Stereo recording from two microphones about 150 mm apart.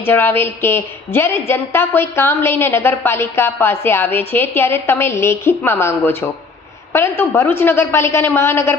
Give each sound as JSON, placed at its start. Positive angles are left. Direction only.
{"t": 0.0, "sound": "a woman's voice", "side_deg": 15}